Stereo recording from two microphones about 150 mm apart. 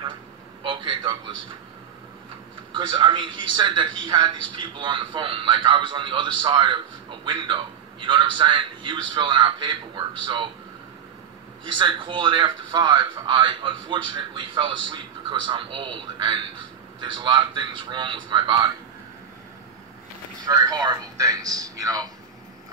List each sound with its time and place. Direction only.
0.7 s a sound: 35° right (ahead or behind)
2.7 s a man's voice: 30° right (ahead or behind)
11.6 s a man's voice: 30° right (ahead or behind)
20.4 s speech: 25° right (ahead or behind)